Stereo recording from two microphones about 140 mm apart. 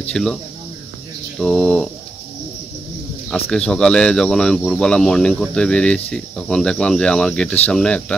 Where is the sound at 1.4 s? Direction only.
5° left (ahead or behind).